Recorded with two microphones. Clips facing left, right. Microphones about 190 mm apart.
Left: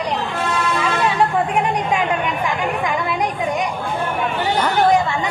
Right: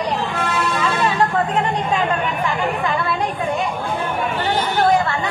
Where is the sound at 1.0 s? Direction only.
10° left (ahead or behind).